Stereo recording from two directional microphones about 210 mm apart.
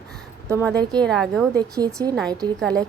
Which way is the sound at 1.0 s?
Centre (ahead or behind).